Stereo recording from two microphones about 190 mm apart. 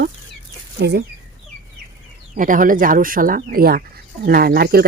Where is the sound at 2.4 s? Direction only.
45° right (ahead or behind).